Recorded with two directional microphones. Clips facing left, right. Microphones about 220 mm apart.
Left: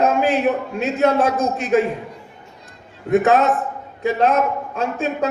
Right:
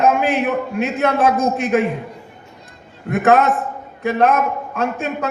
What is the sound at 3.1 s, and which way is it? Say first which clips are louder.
A man's voice: even; 55° right (ahead or behind).